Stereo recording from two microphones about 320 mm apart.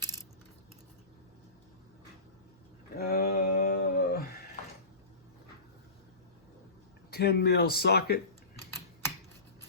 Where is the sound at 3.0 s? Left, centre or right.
Left.